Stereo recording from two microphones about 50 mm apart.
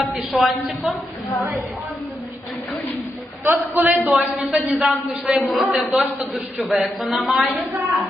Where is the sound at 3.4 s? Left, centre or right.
Right.